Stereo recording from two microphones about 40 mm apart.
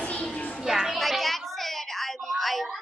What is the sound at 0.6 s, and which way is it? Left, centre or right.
Children playing, centre.